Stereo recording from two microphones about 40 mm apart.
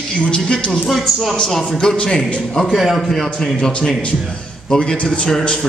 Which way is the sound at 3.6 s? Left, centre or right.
Left.